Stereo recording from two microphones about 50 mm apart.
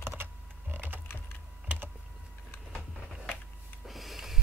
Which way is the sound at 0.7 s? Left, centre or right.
Right.